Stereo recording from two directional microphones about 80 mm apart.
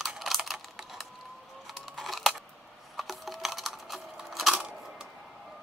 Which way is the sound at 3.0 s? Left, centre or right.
Centre.